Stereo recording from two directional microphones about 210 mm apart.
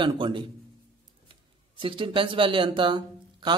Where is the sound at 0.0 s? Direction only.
25° right (ahead or behind).